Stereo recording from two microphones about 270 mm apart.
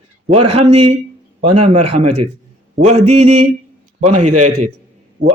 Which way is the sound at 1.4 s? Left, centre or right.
Right.